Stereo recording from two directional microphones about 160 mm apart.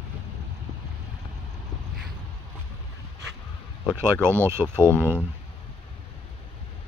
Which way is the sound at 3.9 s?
15° right (ahead or behind).